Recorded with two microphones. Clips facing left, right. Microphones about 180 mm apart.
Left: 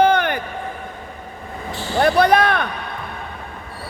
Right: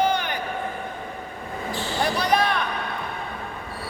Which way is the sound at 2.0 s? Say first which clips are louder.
Left 8 dB; 60° left (ahead or behind).